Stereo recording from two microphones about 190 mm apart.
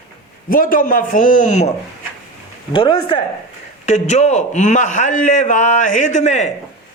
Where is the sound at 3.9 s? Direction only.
35° left (ahead or behind).